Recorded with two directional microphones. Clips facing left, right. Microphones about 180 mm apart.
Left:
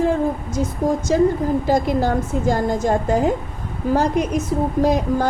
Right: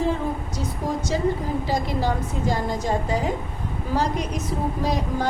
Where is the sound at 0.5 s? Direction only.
50° left (ahead or behind).